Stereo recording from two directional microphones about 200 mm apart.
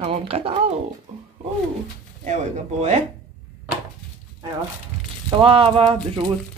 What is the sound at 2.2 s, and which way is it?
Speech, 35° right (ahead or behind).